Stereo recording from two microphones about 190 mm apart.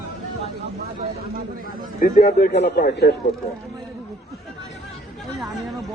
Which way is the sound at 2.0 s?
50° left (ahead or behind).